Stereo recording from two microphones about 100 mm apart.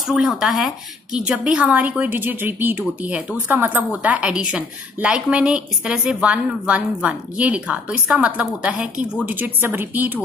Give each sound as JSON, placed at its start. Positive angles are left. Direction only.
{"t": 0.1, "sound": "a woman's voice", "side_deg": -5}